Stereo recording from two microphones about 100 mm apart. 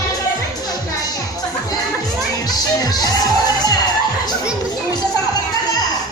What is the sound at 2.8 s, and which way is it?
Music, 40° left (ahead or behind).